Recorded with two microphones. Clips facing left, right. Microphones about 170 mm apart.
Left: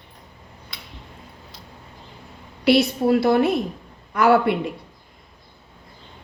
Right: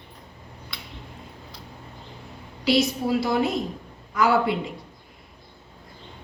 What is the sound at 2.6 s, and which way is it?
A woman's voice, 60° left (ahead or behind).